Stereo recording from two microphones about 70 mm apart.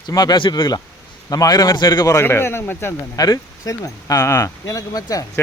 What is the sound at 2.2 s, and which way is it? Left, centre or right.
Speech, left.